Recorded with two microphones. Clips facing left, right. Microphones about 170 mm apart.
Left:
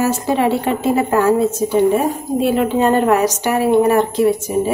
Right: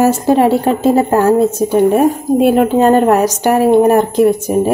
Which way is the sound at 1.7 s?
55° right (ahead or behind).